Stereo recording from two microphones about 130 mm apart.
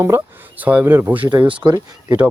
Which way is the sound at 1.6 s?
30° right (ahead or behind).